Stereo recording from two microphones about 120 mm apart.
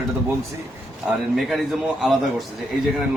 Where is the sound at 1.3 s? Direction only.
Centre (ahead or behind).